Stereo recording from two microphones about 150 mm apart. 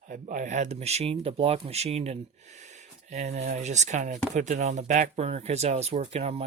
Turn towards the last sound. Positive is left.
turn(degrees=-45)  # may be behind; listen again after turning